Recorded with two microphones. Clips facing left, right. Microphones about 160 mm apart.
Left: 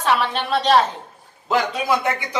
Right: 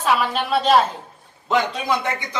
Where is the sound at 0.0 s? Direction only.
5° right (ahead or behind).